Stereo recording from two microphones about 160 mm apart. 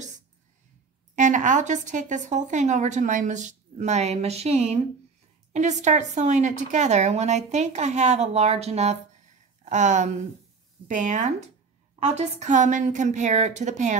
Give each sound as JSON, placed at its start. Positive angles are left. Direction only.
{"t": 1.1, "sound": "speech", "side_deg": -50}